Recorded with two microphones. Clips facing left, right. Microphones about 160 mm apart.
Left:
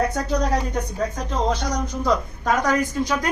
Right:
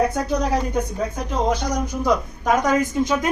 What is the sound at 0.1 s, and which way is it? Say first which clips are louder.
A woman's voice: right 1 dB; 10° right (ahead or behind).